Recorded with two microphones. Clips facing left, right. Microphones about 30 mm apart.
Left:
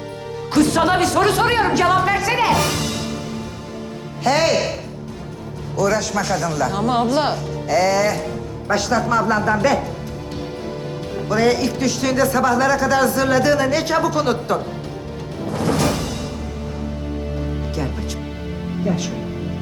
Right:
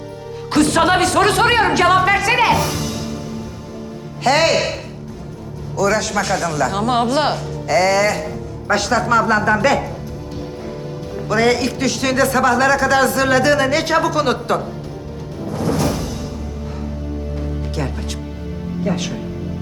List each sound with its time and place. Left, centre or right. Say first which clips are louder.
0.5 s music: right 2 dB; centre
1.2 s a woman's voice: right 2 dB; right
2.6 s music: even; centre
4.2 s speech: right 2 dB; centre
5.9 s speech: right 2 dB; centre
6.5 s speech: right 2 dB; centre
6.8 s a woman's voice: right 1 dB; centre
7.7 s speech: right 2 dB; centre
11.3 s speech: right 1 dB; centre
15.5 s music: even; centre